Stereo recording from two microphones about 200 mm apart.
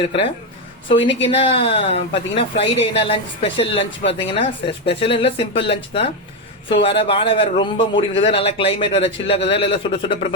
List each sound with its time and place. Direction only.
0.0 s a man's voice: 30° left (ahead or behind)